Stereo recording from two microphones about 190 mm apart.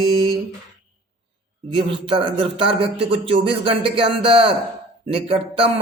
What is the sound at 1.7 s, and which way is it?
A man's voice, 25° right (ahead or behind).